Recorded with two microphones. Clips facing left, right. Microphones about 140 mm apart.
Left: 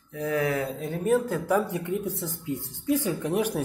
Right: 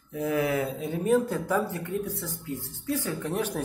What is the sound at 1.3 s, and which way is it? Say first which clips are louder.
Speech: left 2 dB; 10° left (ahead or behind).